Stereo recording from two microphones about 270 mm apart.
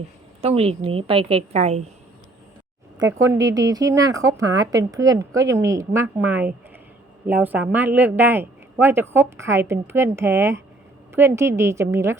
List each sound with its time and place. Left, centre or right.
0.4 s a woman's voice: right
3.0 s speech: centre